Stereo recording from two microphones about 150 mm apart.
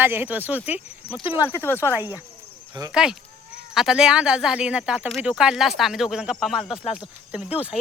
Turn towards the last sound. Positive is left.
turn(degrees=-10)  # may be behind; listen again after turning